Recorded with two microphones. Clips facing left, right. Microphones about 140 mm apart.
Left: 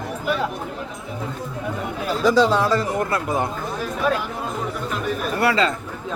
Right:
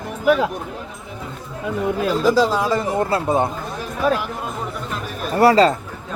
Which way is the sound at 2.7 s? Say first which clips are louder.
Right 2 dB; 25° right (ahead or behind).